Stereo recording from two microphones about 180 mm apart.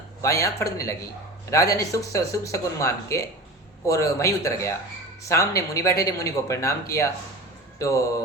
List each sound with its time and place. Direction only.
0.2 s speech: 15° left (ahead or behind)